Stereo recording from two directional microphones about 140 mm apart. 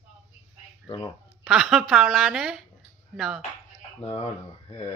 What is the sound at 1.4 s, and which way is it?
A woman's voice, centre (ahead or behind).